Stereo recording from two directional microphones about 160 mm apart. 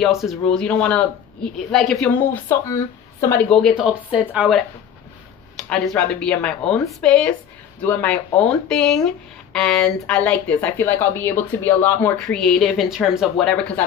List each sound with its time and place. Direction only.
0.0 s speech: centre (ahead or behind)
2.3 s speech: 15° left (ahead or behind)
3.4 s speech: centre (ahead or behind)